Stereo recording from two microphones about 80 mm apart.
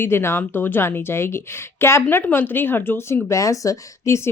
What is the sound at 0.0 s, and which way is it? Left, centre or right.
A woman's voice, left.